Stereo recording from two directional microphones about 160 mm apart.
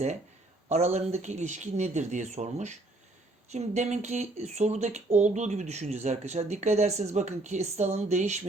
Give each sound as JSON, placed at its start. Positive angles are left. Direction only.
{"t": 0.7, "sound": "speech", "side_deg": -45}